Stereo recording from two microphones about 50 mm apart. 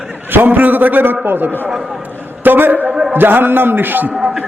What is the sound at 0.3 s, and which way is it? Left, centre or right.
A man's voice, right.